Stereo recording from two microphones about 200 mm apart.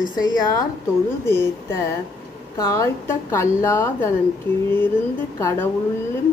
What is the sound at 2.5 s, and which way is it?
A woman's voice, 15° left (ahead or behind).